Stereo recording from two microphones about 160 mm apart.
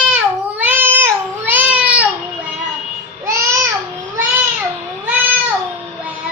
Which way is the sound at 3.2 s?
20° right (ahead or behind).